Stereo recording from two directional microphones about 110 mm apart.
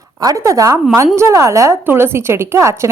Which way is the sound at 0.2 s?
30° right (ahead or behind).